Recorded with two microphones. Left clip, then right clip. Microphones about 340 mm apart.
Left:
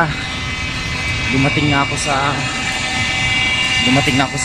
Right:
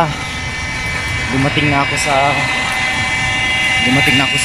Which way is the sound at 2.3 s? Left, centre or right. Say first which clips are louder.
Right 4 dB; right.